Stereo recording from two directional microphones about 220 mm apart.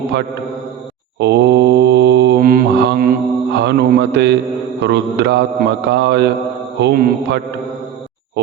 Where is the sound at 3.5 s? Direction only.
50° right (ahead or behind).